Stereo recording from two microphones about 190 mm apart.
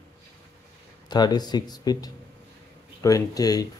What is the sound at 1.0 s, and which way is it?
Speech, 20° left (ahead or behind).